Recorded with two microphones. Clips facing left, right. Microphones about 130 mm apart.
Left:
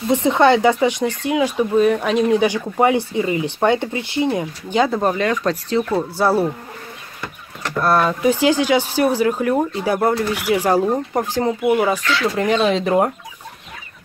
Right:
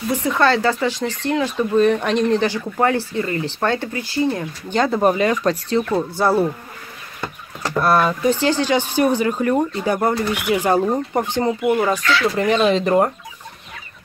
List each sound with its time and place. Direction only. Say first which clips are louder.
0.1 s speech: left 4 dB; 25° left (ahead or behind)
4.7 s speech: left 1 dB; 5° left (ahead or behind)
5.0 s speech: right 2 dB; 10° right (ahead or behind)
7.7 s speech: even; 5° right (ahead or behind)
8.2 s speech: left 2 dB; 10° left (ahead or behind)